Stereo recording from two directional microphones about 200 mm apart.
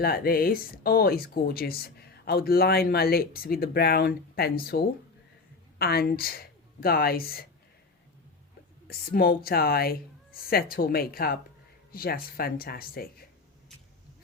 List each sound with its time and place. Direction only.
0.0 s a woman's voice: 50° left (ahead or behind)
8.9 s speech: 50° left (ahead or behind)